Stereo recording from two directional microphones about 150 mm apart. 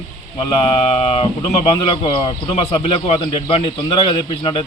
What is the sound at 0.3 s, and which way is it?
A man's voice, 40° left (ahead or behind).